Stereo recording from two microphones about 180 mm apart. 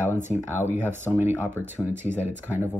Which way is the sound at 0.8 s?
10° right (ahead or behind).